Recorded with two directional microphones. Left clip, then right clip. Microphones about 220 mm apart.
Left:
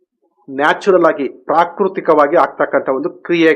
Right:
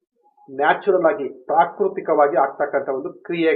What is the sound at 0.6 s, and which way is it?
Speech, 35° left (ahead or behind).